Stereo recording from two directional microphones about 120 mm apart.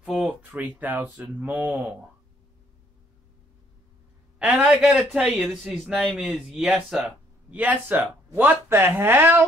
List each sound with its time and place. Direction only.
0.0 s a sound: 5° right (ahead or behind)
0.6 s speech: 15° right (ahead or behind)
1.7 s a man's voice: 5° right (ahead or behind)
4.4 s a man's voice: 10° right (ahead or behind)